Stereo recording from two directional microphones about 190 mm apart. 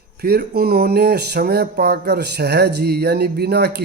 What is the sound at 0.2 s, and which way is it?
Speech, 55° right (ahead or behind).